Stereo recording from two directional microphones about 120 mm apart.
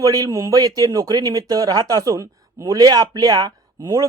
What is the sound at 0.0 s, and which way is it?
Speech, 30° right (ahead or behind).